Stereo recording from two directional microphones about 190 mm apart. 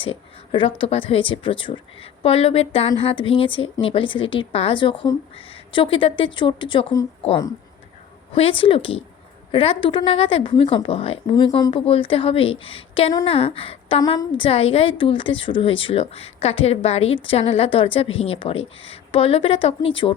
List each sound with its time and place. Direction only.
0.0 s a woman's voice: 25° left (ahead or behind)